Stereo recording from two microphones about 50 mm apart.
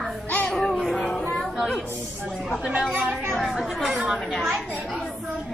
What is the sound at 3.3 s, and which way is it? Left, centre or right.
Speech, centre.